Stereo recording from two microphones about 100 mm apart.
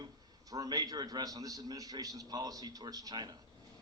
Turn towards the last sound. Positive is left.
turn(degrees=-45)  # may be behind; listen again after turning